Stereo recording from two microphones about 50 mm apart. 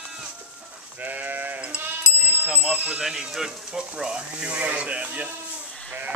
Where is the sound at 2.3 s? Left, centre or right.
Right.